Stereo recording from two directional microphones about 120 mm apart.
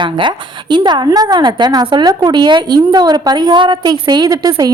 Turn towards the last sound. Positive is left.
turn(degrees=-30)  # may be behind; listen again after turning